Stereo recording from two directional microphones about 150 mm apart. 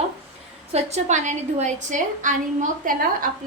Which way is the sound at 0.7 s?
45° right (ahead or behind).